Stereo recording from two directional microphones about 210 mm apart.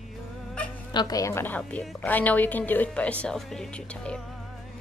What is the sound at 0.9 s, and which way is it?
A woman's voice, 20° left (ahead or behind).